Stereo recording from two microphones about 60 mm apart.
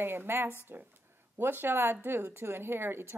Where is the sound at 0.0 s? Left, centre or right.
Right.